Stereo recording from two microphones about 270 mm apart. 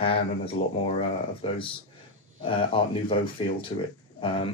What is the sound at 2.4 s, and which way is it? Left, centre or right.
Speech, centre.